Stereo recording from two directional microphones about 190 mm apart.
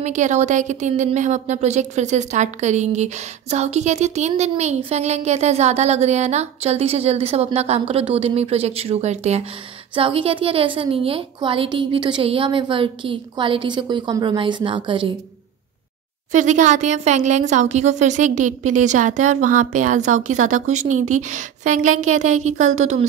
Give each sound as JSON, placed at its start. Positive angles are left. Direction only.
{"t": 0.0, "sound": "a woman's voice", "side_deg": -40}
{"t": 16.3, "sound": "speech", "side_deg": -40}